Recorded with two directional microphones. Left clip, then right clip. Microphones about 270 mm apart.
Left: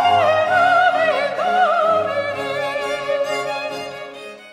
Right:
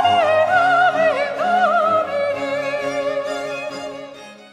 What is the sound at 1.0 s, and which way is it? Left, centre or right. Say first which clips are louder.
Opera: even; centre.